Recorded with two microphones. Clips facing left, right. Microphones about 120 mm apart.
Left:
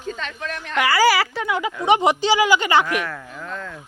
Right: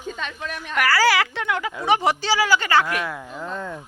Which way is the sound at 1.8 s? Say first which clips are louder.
Left 3 dB; 20° left (ahead or behind).